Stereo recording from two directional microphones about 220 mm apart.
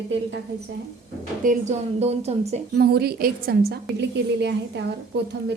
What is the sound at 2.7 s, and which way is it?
A woman's voice, 45° right (ahead or behind).